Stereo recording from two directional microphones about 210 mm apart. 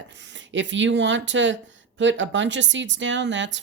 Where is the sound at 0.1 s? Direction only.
60° right (ahead or behind).